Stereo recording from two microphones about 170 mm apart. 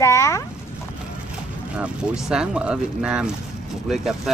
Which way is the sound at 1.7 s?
5° right (ahead or behind).